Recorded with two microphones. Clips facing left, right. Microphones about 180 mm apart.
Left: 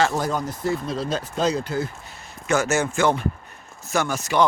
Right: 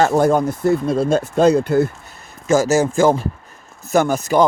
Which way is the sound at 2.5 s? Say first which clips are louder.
Right 7 dB; 40° right (ahead or behind).